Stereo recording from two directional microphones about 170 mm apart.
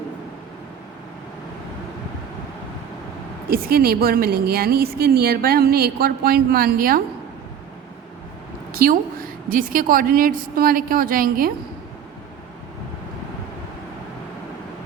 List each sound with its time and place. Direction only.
3.5 s a woman's voice: 60° right (ahead or behind)
8.7 s a woman's voice: 60° right (ahead or behind)